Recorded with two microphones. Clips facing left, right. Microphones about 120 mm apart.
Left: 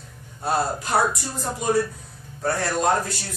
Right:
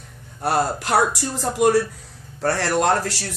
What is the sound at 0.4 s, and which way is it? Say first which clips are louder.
Speech: right 3 dB; 80° right.